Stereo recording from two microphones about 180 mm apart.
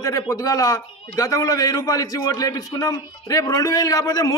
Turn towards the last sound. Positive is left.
turn(degrees=20)  # may be behind; listen again after turning